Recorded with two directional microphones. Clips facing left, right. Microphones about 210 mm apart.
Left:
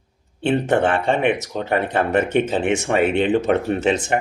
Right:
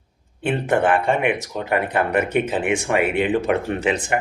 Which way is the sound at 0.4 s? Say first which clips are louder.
Left 1 dB; 25° left (ahead or behind).